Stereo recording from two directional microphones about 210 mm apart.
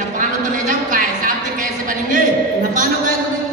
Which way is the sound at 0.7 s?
40° right (ahead or behind).